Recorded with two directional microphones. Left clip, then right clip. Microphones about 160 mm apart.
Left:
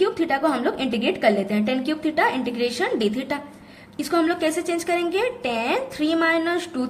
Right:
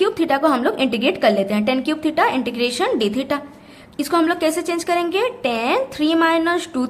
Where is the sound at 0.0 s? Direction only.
30° right (ahead or behind).